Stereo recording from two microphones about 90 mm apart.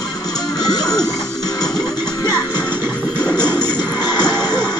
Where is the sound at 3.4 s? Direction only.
50° left (ahead or behind).